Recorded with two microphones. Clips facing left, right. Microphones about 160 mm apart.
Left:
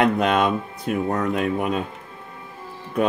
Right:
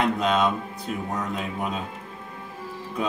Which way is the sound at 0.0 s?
65° left (ahead or behind).